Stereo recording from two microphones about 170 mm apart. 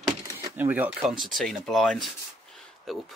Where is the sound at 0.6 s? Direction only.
10° right (ahead or behind).